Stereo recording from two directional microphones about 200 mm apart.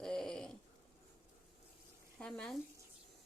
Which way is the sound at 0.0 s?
Centre (ahead or behind).